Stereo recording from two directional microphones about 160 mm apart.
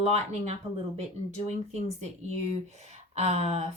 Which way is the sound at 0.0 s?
45° right (ahead or behind).